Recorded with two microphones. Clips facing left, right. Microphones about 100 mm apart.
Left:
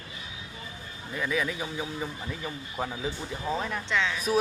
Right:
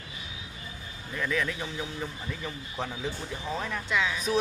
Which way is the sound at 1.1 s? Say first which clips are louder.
Left 1 dB; 10° left (ahead or behind).